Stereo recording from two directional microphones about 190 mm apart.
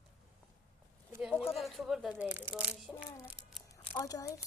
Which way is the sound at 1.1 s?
5° right (ahead or behind).